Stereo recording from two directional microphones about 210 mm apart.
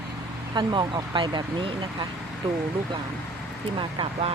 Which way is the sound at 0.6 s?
20° right (ahead or behind).